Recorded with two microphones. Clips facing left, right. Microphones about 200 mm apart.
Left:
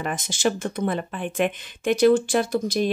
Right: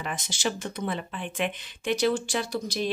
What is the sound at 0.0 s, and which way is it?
Speech, 50° left (ahead or behind).